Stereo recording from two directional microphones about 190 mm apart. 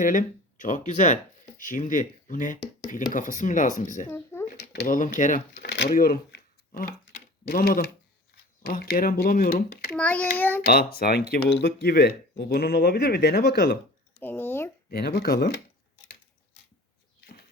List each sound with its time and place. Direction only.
0.0 s speech: 45° left (ahead or behind)
4.1 s a sound: 10° left (ahead or behind)
4.5 s a sound: 60° left (ahead or behind)
4.9 s speech: 45° left (ahead or behind)
5.7 s shuffling cards: 60° left (ahead or behind)
7.4 s speech: 50° left (ahead or behind)
9.9 s a child's voice: 5° left (ahead or behind)
10.9 s speech: 50° left (ahead or behind)
14.2 s a sound: 10° left (ahead or behind)
14.8 s speech: 55° left (ahead or behind)